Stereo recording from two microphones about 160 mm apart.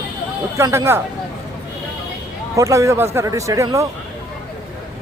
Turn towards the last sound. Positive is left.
turn(degrees=-20)  # may be behind; listen again after turning